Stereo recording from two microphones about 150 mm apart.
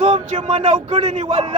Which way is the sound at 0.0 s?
50° right (ahead or behind).